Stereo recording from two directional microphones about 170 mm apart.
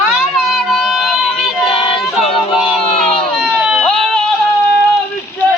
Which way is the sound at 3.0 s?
Centre (ahead or behind).